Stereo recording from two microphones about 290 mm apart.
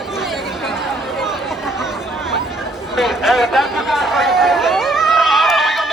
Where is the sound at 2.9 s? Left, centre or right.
Centre.